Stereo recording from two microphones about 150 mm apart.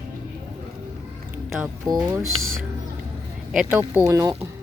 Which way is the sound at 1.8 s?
25° right (ahead or behind).